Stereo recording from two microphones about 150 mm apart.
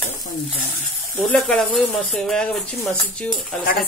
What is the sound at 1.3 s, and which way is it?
Speech, 5° left (ahead or behind).